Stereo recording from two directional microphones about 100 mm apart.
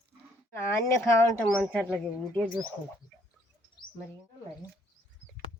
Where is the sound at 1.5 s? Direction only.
10° left (ahead or behind).